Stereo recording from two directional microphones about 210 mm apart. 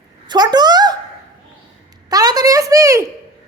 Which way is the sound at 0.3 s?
20° right (ahead or behind).